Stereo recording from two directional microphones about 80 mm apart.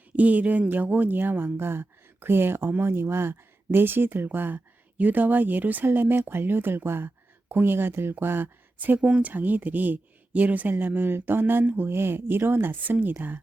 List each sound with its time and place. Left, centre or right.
0.2 s speech: centre